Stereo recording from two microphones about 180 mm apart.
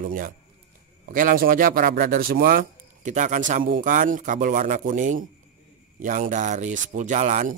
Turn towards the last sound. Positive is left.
turn(degrees=-40)  # may be behind; listen again after turning